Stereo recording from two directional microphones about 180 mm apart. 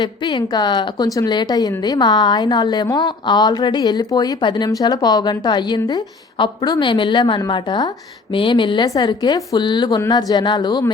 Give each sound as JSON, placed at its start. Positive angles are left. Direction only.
{"t": 0.0, "sound": "a woman's voice", "side_deg": 25}